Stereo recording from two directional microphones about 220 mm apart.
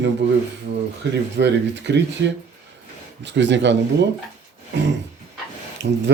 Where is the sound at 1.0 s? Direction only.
50° right (ahead or behind).